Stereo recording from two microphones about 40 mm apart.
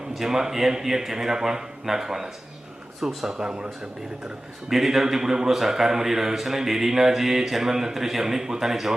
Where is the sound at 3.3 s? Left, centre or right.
Right.